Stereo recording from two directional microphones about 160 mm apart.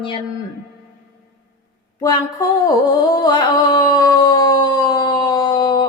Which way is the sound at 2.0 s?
25° left (ahead or behind).